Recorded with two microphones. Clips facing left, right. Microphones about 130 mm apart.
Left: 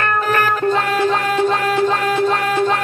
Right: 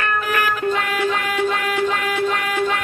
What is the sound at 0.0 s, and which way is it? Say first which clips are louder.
Music: left 4 dB; 40° left (ahead or behind).